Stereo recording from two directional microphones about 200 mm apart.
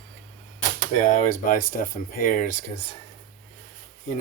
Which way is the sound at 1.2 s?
40° left (ahead or behind).